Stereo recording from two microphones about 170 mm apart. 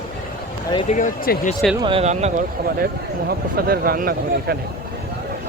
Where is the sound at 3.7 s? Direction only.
60° right (ahead or behind).